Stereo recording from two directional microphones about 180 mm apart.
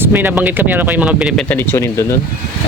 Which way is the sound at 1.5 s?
15° left (ahead or behind).